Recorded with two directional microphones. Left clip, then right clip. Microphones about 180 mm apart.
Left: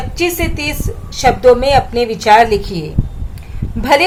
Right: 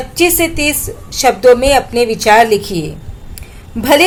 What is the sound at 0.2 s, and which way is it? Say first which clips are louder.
Speech: right 5 dB; 25° right (ahead or behind).